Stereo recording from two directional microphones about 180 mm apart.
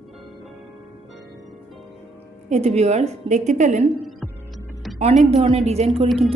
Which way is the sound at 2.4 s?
40° right (ahead or behind).